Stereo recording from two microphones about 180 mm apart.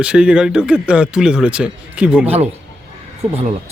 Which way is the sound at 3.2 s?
35° right (ahead or behind).